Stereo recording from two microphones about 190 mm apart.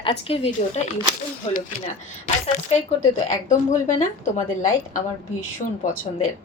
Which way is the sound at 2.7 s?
35° left (ahead or behind).